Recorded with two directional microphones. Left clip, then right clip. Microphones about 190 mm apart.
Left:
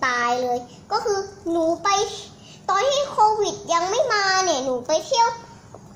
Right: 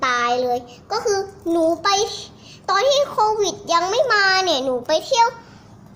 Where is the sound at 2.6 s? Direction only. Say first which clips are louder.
Right 3 dB; 10° right (ahead or behind).